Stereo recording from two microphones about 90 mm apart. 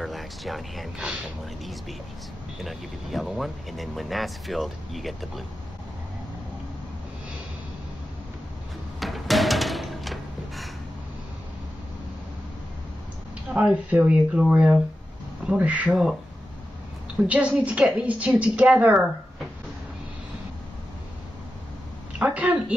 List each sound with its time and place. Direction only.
0.0 s speech: centre (ahead or behind)
9.0 s music: centre (ahead or behind)
13.5 s a woman's voice: 15° right (ahead or behind)
15.9 s speech: 5° right (ahead or behind)
17.3 s a woman's voice: 15° right (ahead or behind)
22.2 s a woman's voice: 15° right (ahead or behind)